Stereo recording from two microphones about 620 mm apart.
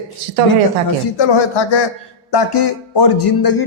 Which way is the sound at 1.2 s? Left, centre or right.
Left.